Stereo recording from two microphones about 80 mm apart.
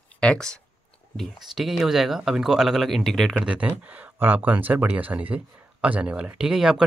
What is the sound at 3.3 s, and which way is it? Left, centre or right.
Speech, centre.